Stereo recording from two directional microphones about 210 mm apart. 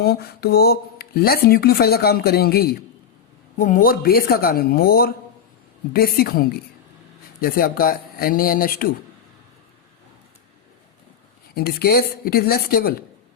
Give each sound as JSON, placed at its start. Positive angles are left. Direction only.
{"t": 0.0, "sound": "speech", "side_deg": 45}
{"t": 11.5, "sound": "speech", "side_deg": 45}